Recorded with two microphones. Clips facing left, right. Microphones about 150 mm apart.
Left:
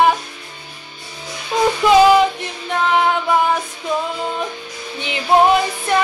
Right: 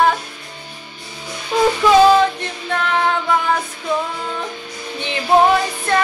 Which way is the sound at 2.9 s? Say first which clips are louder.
Left 2 dB; 15° left (ahead or behind).